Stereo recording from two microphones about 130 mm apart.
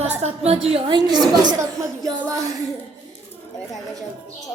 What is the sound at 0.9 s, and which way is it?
A woman's voice, 35° right (ahead or behind).